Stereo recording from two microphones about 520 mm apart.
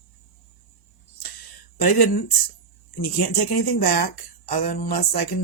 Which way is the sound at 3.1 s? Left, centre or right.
Left.